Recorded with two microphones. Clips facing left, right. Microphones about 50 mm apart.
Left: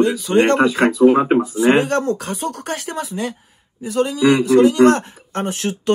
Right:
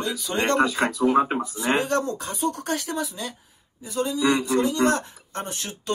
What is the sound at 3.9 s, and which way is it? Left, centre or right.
Speech, left.